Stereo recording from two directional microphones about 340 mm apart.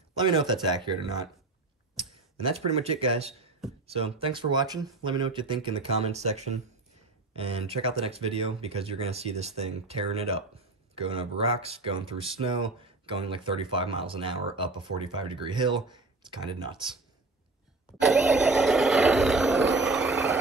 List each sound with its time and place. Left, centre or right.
0.2 s speech: centre
2.4 s speech: centre
18.0 s vehicle: centre